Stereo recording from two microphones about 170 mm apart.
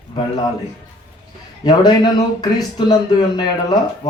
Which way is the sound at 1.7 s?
25° left (ahead or behind).